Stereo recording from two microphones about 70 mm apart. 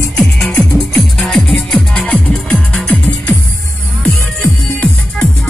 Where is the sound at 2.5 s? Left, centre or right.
Centre.